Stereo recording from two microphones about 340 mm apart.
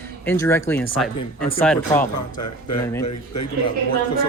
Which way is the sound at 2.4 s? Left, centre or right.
Left.